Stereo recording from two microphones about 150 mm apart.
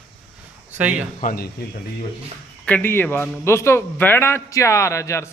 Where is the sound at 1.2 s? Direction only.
90° left.